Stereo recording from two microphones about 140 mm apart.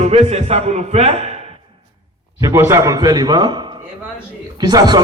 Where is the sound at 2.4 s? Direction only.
20° right (ahead or behind).